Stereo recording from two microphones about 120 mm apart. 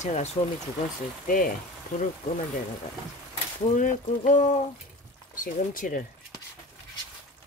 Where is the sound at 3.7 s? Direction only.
90° left.